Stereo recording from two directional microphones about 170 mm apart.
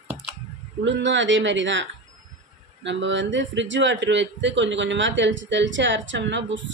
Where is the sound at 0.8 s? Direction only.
90° right.